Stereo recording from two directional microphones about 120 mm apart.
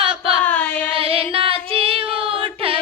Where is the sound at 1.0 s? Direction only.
50° right (ahead or behind).